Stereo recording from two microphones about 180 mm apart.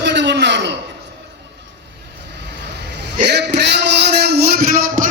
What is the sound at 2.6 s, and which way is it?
Vehicle, 70° right (ahead or behind).